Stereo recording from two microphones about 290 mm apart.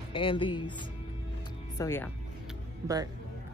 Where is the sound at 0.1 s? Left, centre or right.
Centre.